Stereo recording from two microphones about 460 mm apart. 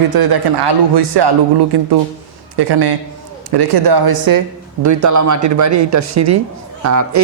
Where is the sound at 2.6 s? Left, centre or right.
Right.